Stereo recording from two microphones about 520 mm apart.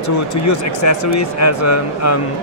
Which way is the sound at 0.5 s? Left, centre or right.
Left.